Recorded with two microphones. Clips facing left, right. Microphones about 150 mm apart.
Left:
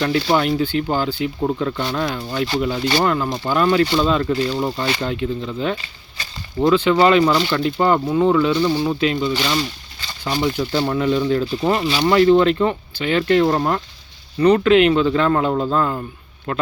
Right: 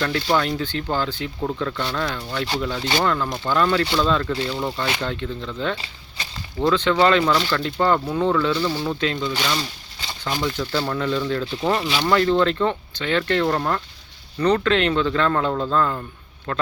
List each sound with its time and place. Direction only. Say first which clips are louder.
0.0 s speech: left 4 dB; 15° left (ahead or behind)
10.7 s speech: left 4 dB; 30° left (ahead or behind)
10.9 s speech: left 5 dB; 15° left (ahead or behind)